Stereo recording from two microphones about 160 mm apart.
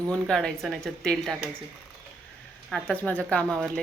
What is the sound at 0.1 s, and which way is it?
Speech, 5° left (ahead or behind).